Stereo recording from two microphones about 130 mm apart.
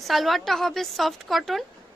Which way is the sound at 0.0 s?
Centre (ahead or behind).